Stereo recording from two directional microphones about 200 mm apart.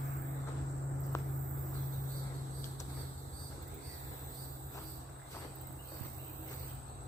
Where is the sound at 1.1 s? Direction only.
15° left (ahead or behind).